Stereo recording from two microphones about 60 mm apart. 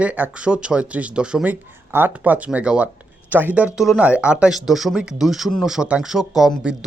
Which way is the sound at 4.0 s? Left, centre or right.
Centre.